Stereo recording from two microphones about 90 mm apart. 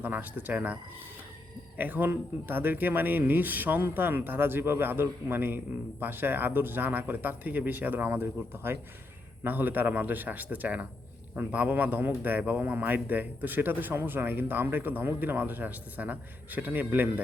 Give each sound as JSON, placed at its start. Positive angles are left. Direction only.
{"t": 0.0, "sound": "speech", "side_deg": -20}